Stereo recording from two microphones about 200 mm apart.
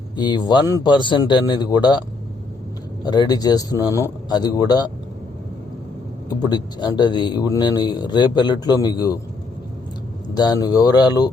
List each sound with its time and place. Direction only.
0.2 s speech: 20° left (ahead or behind)
6.2 s speech: 20° left (ahead or behind)
10.3 s speech: 20° left (ahead or behind)